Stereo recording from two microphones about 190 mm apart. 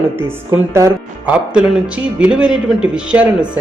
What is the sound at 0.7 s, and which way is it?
Speech, 15° right (ahead or behind).